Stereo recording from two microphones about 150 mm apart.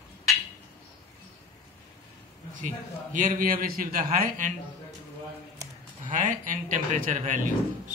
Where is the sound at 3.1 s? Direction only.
65° right (ahead or behind).